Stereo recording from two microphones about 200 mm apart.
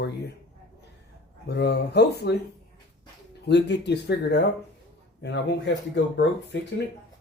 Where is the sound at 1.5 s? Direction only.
55° left (ahead or behind).